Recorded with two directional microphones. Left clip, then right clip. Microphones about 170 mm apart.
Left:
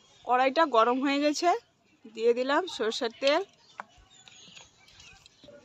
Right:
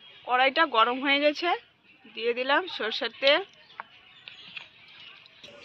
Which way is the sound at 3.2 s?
65° left (ahead or behind).